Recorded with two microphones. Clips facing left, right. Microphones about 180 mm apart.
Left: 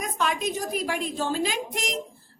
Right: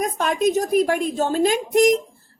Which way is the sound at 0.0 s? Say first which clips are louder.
Right 7 dB; 45° right (ahead or behind).